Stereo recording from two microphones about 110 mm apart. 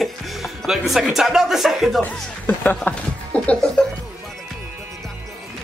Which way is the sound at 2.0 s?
15° left (ahead or behind).